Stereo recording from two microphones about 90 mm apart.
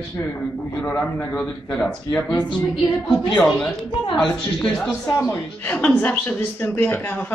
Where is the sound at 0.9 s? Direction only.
15° left (ahead or behind).